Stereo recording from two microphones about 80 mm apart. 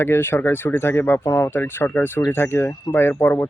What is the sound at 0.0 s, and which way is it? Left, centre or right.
Speech, left.